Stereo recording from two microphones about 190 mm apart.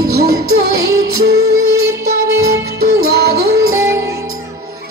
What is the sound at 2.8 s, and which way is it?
Music, 55° right (ahead or behind).